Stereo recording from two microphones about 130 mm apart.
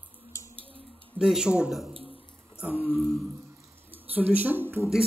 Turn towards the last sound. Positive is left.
turn(degrees=-15)  # may be behind; listen again after turning